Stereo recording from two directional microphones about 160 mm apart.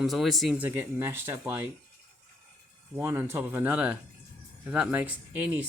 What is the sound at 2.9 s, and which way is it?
Speech, 15° right (ahead or behind).